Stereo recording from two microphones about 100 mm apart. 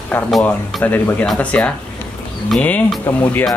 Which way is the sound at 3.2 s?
20° left (ahead or behind).